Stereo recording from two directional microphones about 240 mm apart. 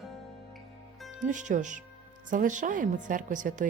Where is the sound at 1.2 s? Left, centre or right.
Right.